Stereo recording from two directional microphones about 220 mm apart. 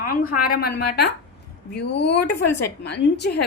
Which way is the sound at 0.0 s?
40° left (ahead or behind).